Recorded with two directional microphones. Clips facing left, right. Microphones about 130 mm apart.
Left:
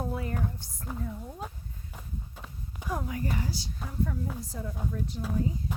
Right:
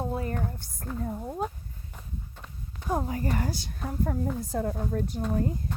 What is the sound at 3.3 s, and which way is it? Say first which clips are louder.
Speech: right 3 dB; 55° right (ahead or behind).